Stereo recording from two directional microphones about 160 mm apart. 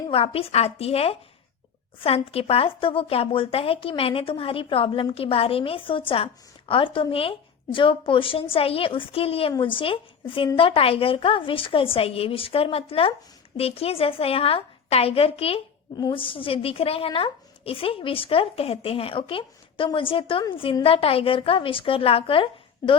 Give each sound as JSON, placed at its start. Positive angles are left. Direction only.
{"t": 0.1, "sound": "speech", "side_deg": 35}